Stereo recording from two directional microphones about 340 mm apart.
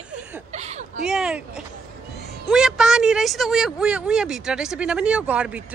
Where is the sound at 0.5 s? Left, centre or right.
Centre.